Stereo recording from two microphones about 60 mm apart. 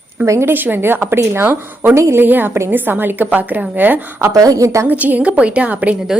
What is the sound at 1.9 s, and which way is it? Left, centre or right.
Speech, right.